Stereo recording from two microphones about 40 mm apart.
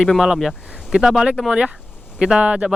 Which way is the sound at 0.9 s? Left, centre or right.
Right.